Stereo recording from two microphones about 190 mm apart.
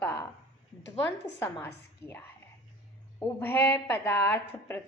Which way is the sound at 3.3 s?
10° left (ahead or behind).